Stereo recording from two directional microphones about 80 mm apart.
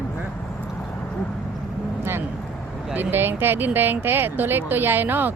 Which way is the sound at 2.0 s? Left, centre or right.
Right.